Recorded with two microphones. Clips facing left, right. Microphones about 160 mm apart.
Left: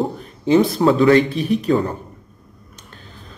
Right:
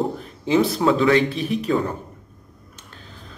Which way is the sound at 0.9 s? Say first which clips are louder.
Left 6 dB; 45° left (ahead or behind).